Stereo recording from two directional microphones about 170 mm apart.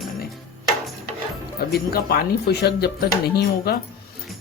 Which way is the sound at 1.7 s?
65° left (ahead or behind).